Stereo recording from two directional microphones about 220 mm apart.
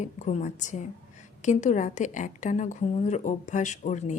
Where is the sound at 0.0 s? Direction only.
30° left (ahead or behind).